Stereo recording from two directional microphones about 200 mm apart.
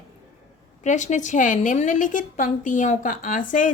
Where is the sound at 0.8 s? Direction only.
35° left (ahead or behind).